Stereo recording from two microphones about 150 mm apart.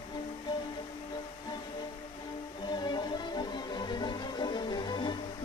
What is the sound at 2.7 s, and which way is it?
Music, 30° left (ahead or behind).